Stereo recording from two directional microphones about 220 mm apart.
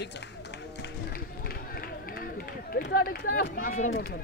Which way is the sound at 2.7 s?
45° left (ahead or behind).